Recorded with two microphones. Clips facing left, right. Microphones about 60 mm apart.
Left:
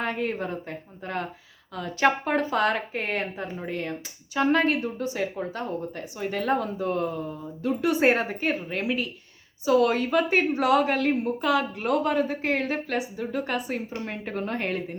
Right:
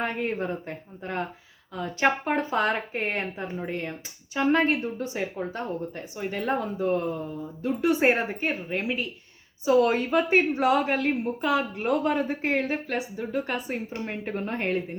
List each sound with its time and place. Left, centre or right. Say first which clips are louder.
0.0 s a woman's voice: even; right
3.7 s a woman's voice: left 1 dB; right
9.6 s a woman's voice: even; right